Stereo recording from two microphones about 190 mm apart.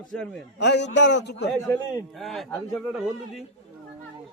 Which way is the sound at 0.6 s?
65° left (ahead or behind).